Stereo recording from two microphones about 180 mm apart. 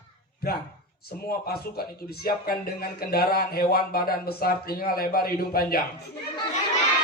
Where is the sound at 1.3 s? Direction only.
60° left (ahead or behind).